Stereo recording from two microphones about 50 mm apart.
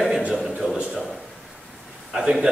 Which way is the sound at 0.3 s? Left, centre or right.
Centre.